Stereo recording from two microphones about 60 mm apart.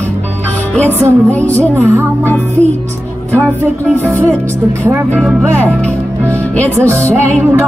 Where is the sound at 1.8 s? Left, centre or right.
Right.